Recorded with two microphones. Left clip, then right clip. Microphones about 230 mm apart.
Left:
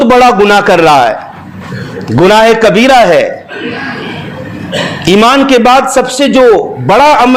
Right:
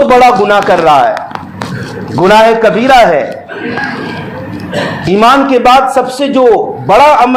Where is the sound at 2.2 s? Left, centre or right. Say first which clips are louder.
Left 1 dB; left.